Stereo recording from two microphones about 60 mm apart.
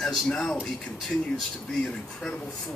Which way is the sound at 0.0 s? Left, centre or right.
Centre.